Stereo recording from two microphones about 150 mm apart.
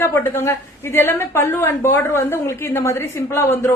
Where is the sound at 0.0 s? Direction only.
15° left (ahead or behind).